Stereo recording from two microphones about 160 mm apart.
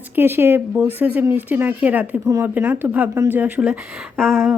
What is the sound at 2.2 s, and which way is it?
A woman's voice, 20° right (ahead or behind).